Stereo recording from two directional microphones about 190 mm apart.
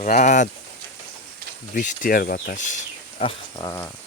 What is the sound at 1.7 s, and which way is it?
Speech, 45° left (ahead or behind).